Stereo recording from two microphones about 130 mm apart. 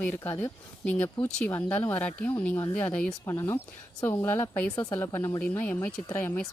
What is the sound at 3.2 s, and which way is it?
Speech, 20° left (ahead or behind).